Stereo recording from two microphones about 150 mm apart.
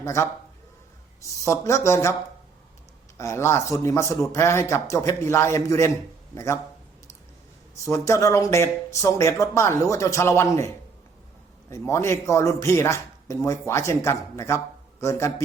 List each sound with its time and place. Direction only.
0.0 s a man's voice: 20° left (ahead or behind)
1.5 s speech: 20° left (ahead or behind)
3.2 s speech: 20° left (ahead or behind)
7.9 s speech: 20° left (ahead or behind)
11.7 s speech: 20° left (ahead or behind)